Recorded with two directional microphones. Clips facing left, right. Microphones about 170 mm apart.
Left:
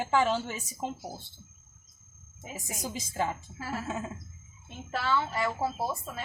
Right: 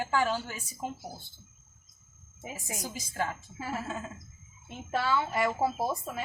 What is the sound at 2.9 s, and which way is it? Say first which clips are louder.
Speech: left 3 dB; 20° left (ahead or behind).